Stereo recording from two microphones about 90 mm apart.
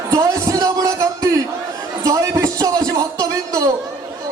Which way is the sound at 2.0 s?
40° right (ahead or behind).